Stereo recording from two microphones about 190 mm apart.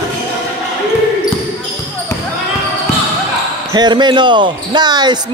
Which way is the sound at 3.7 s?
25° right (ahead or behind).